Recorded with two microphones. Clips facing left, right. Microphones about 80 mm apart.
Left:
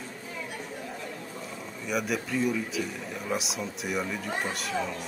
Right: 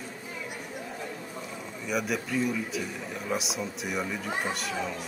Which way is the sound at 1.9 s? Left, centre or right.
Centre.